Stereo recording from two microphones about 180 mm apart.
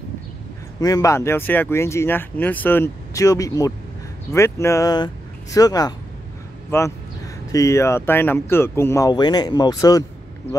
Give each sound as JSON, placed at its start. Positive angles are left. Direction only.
{"t": 0.7, "sound": "speech", "side_deg": 20}
{"t": 7.5, "sound": "speech", "side_deg": 15}